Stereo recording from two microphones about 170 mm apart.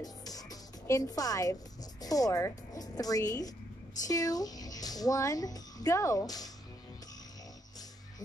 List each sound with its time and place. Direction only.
0.0 s a woman's voice: 20° left (ahead or behind)